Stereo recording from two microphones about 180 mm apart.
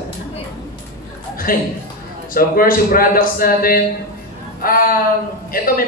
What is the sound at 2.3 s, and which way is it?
Speech, 50° left (ahead or behind).